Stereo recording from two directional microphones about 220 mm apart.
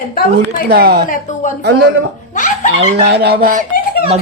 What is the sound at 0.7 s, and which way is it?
Speech, 45° right (ahead or behind).